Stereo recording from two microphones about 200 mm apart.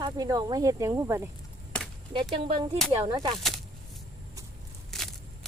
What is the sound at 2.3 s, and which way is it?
Speech, 25° right (ahead or behind).